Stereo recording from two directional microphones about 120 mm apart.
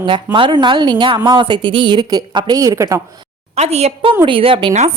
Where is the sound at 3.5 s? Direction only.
65° right (ahead or behind).